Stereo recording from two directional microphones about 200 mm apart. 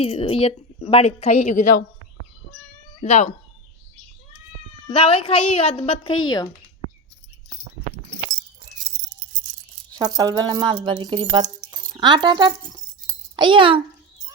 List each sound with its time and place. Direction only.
0.0 s a woman's voice: 25° left (ahead or behind)
3.0 s a woman's voice: 35° left (ahead or behind)
4.9 s a woman's voice: 30° left (ahead or behind)
10.0 s speech: 20° right (ahead or behind)